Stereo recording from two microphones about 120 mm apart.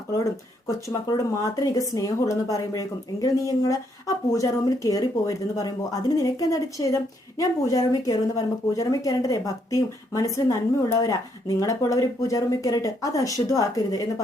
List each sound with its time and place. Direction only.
0.9 s speech: 30° left (ahead or behind)